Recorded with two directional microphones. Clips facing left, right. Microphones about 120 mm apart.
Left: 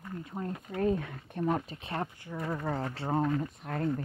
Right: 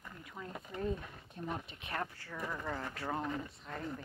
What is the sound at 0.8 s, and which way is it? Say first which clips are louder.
Speech: left 9 dB; 75° left (ahead or behind).